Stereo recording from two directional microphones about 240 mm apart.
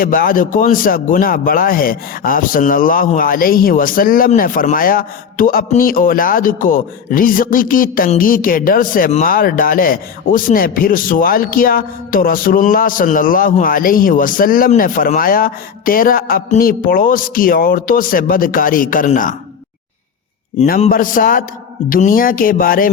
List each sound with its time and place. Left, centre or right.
0.0 s a man's voice: left
20.6 s a man's voice: left